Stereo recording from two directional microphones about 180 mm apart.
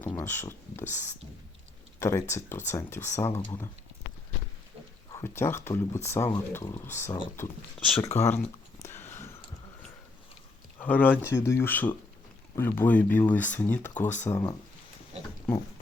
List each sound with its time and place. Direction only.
0.0 s speech: 10° left (ahead or behind)
2.0 s speech: 15° left (ahead or behind)
5.1 s speech: 15° left (ahead or behind)
8.8 s a sound: 10° left (ahead or behind)
10.8 s speech: 10° left (ahead or behind)